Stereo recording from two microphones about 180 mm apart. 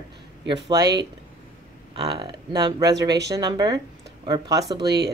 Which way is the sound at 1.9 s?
25° right (ahead or behind).